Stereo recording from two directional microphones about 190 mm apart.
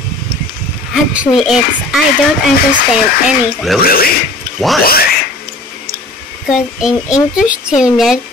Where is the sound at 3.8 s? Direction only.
50° left (ahead or behind).